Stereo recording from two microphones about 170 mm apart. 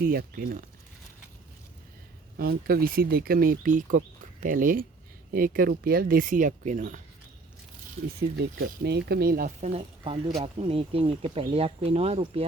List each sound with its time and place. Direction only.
0.0 s speech: 60° right (ahead or behind)
2.4 s speech: 60° right (ahead or behind); by 7.0 s 45° right (ahead or behind)
8.8 s speech: 75° right (ahead or behind)
9.6 s speech: 40° right (ahead or behind)